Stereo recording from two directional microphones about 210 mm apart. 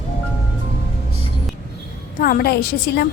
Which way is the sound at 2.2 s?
45° left (ahead or behind).